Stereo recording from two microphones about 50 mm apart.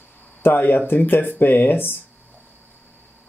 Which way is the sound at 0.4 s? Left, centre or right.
Left.